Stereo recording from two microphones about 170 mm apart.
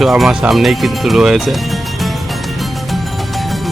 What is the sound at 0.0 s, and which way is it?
Speech, centre (ahead or behind).